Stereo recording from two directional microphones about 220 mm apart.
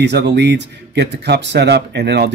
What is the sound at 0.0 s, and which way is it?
Speech, 50° right (ahead or behind).